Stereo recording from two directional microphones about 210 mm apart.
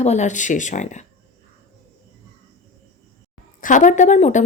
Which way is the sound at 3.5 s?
40° left (ahead or behind).